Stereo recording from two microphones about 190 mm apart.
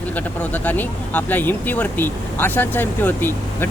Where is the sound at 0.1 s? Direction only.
10° left (ahead or behind).